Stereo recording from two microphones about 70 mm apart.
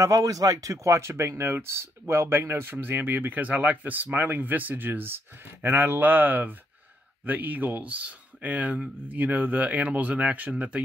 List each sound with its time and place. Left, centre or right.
0.0 s speech: right